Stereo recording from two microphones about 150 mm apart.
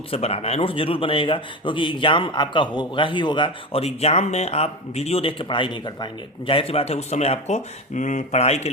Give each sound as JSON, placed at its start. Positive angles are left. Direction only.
{"t": 0.1, "sound": "a man's voice", "side_deg": 40}